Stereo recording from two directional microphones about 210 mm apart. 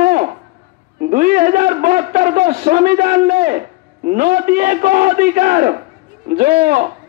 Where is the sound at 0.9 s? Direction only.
40° right (ahead or behind).